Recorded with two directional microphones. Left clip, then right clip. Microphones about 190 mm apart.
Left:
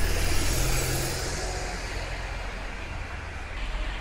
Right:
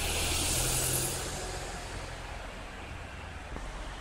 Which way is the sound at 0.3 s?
25° left (ahead or behind).